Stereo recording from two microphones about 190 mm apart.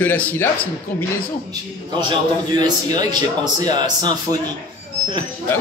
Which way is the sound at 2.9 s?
20° right (ahead or behind).